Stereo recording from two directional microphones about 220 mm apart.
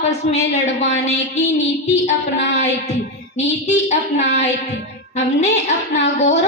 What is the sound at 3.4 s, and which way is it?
Female singing, 30° left (ahead or behind).